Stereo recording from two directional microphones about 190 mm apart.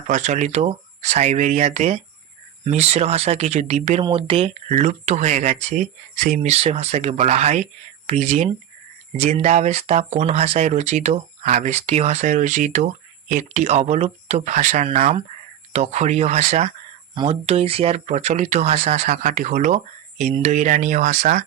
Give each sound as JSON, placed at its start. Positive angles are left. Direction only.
{"t": 0.1, "sound": "speech", "side_deg": -40}
{"t": 4.0, "sound": "speech", "side_deg": -30}